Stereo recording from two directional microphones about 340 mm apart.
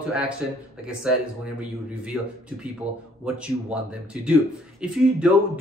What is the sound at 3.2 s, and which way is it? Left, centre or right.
Speech, centre.